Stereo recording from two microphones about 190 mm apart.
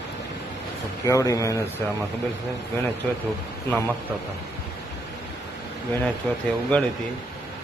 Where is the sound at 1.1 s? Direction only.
15° left (ahead or behind).